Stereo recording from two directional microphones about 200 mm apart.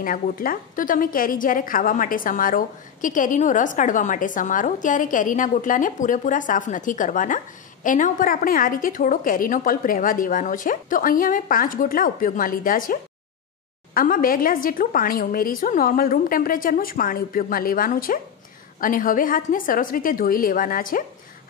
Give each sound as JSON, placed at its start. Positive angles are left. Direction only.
{"t": 0.0, "sound": "a woman's voice", "side_deg": 45}